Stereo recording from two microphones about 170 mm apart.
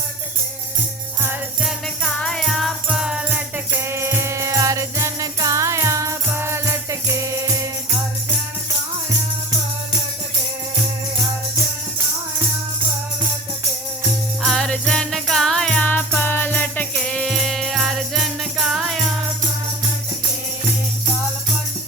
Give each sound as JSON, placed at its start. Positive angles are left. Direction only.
{"t": 1.6, "sound": "music", "side_deg": 5}
{"t": 14.4, "sound": "music", "side_deg": 5}